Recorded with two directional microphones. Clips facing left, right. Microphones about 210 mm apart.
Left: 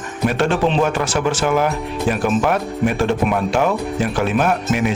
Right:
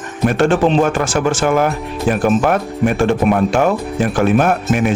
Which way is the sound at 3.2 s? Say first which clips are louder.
Right 5 dB; 50° right (ahead or behind).